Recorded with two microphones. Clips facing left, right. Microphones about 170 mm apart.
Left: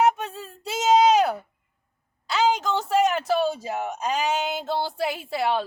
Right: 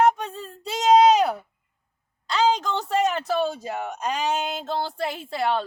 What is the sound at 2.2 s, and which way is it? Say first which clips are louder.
A woman's voice: right 1 dB; 5° left (ahead or behind).